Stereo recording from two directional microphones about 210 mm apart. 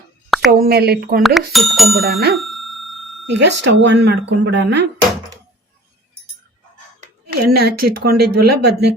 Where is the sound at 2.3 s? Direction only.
Centre (ahead or behind).